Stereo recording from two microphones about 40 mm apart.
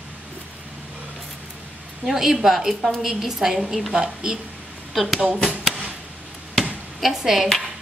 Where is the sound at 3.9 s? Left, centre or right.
Centre.